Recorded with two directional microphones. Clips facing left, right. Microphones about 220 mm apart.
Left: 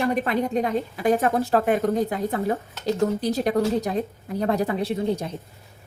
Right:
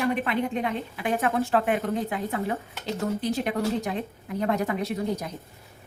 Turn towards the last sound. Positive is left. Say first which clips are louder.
# left 4 dB
turn(degrees=30)  # may be behind; listen again after turning